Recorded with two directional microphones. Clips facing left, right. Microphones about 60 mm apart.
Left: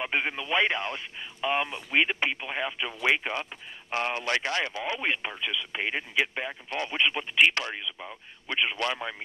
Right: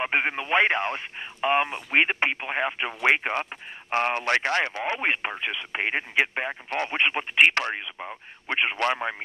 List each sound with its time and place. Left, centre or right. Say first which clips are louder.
0.0 s speech: right 4 dB; right